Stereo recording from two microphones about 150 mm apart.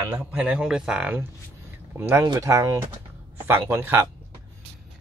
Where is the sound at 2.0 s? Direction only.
15° right (ahead or behind).